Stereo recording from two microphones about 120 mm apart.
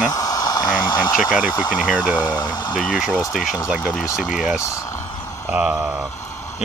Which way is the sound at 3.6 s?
5° right (ahead or behind).